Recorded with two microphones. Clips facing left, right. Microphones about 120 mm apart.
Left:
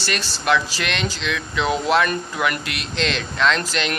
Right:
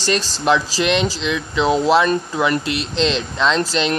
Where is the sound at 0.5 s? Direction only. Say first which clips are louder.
Right 4 dB; 30° right (ahead or behind).